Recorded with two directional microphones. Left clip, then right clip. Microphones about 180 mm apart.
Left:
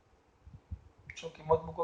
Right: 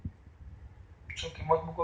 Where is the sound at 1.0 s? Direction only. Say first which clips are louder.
Right 3 dB; 30° left (ahead or behind).